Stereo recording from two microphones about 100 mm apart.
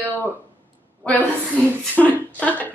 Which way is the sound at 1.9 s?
15° left (ahead or behind).